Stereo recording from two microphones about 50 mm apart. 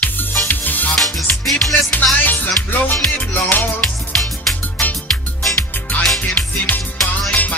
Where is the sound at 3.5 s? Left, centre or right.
Left.